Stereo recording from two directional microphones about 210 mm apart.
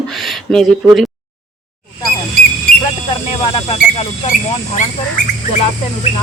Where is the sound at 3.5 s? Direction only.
30° left (ahead or behind).